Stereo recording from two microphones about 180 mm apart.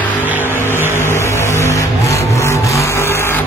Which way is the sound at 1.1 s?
15° left (ahead or behind).